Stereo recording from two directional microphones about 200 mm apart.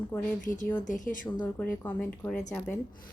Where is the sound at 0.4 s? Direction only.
40° left (ahead or behind).